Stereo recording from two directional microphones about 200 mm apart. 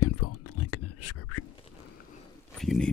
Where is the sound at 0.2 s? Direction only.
90° left.